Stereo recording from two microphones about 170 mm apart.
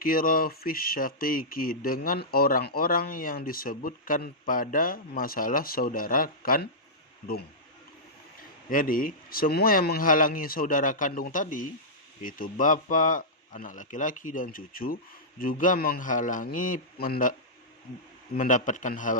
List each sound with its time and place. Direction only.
0.0 s speech: 55° left (ahead or behind)
8.4 s speech: 55° left (ahead or behind)
18.3 s speech: 50° left (ahead or behind)